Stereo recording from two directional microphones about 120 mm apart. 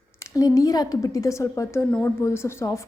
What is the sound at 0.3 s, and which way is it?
A woman's voice, 30° left (ahead or behind).